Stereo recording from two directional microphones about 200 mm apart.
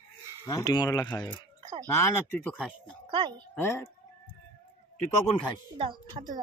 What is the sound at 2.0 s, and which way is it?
Speech, 10° left (ahead or behind).